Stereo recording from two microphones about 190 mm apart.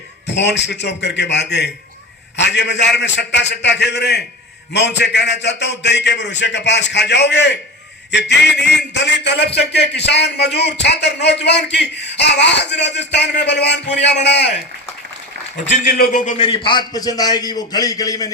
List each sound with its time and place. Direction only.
0.3 s a man's voice: 65° left (ahead or behind)
15.6 s a man's voice: 40° left (ahead or behind)
16.6 s a man's voice: 20° left (ahead or behind)